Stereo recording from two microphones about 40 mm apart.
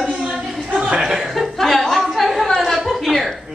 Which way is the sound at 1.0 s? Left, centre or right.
Centre.